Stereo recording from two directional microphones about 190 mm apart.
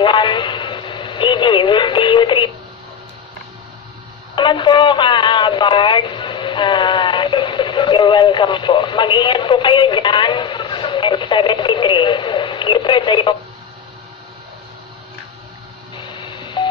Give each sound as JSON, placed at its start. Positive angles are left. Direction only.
{"t": 0.0, "sound": "radio", "side_deg": 25}
{"t": 4.4, "sound": "radio", "side_deg": 25}
{"t": 16.0, "sound": "telephone dialing", "side_deg": 25}